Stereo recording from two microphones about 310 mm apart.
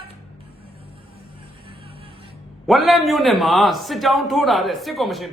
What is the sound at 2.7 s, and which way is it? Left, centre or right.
A man's voice, centre.